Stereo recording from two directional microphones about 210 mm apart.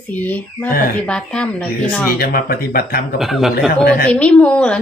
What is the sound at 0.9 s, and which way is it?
Speech, 5° left (ahead or behind).